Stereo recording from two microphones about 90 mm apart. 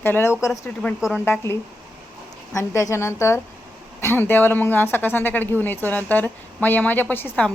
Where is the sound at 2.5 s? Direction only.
35° left (ahead or behind).